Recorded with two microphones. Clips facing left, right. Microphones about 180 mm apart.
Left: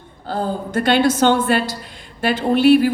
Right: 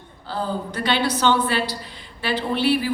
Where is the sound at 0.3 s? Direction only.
50° left (ahead or behind).